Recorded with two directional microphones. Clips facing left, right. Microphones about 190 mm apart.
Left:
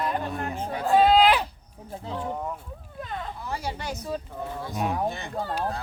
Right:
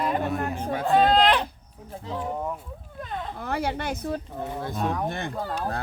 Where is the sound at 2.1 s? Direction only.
5° right (ahead or behind).